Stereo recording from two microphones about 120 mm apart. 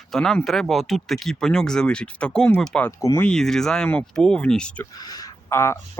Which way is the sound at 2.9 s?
25° left (ahead or behind).